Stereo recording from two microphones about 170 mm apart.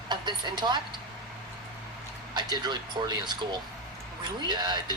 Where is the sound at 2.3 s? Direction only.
25° right (ahead or behind).